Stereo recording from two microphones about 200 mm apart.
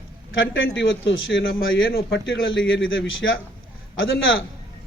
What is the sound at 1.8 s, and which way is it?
Speech, 50° left (ahead or behind).